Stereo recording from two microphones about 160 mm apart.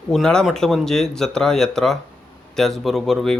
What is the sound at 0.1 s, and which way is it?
Speech, 5° left (ahead or behind).